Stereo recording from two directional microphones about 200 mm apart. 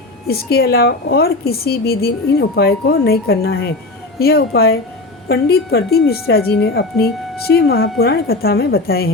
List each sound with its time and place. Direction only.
0.3 s speech: 50° left (ahead or behind)